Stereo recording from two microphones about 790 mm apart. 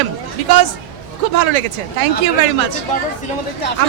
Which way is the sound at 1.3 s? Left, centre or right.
Right.